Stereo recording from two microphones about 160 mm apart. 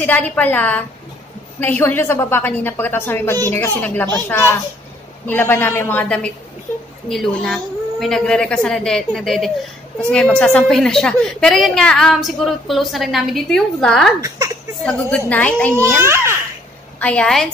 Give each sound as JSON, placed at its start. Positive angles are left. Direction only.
{"t": 0.0, "sound": "a woman's voice", "side_deg": 10}
{"t": 14.2, "sound": "a sound", "side_deg": -20}
{"t": 14.9, "sound": "a woman's voice", "side_deg": 10}
{"t": 16.0, "sound": "a child's voice", "side_deg": -15}
{"t": 17.0, "sound": "a woman's voice", "side_deg": 5}